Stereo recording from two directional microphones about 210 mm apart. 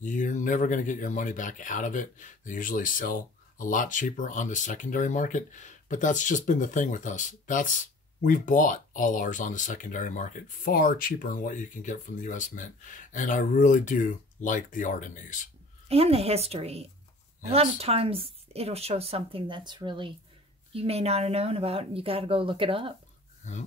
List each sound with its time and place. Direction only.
0.0 s speech: 35° left (ahead or behind)
15.9 s a woman's voice: 30° right (ahead or behind)
23.4 s speech: 35° left (ahead or behind)